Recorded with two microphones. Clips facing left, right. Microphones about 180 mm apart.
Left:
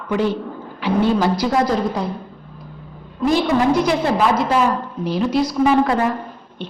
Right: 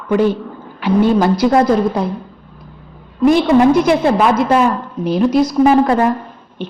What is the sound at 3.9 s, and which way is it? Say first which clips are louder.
A woman's voice: right 5 dB; 55° right (ahead or behind).